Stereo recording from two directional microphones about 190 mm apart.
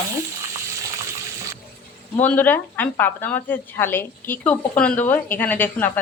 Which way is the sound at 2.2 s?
10° left (ahead or behind).